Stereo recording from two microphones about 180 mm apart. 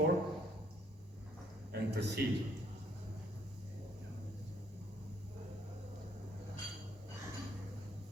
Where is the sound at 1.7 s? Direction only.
70° right (ahead or behind).